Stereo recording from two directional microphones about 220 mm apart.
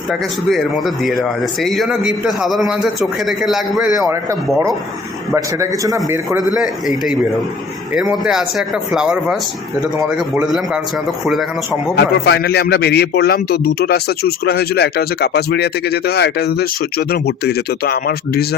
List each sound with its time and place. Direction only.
0.1 s a man's voice: centre (ahead or behind)
3.9 s a man's voice: 15° right (ahead or behind)
6.5 s a man's voice: centre (ahead or behind)
11.9 s a man's voice: 50° left (ahead or behind)